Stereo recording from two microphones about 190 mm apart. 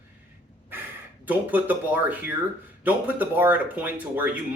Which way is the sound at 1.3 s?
10° right (ahead or behind).